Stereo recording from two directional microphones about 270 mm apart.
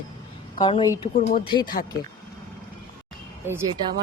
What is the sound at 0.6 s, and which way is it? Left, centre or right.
Speech, centre.